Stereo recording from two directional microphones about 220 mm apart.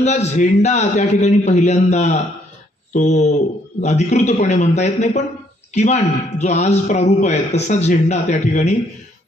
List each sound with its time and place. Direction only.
0.0 s a man's voice: 30° left (ahead or behind)